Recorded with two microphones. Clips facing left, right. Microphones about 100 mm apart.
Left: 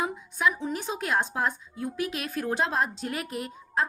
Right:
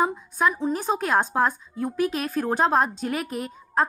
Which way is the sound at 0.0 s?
40° right (ahead or behind).